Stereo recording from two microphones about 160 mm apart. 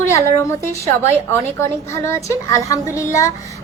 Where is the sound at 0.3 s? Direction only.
15° left (ahead or behind).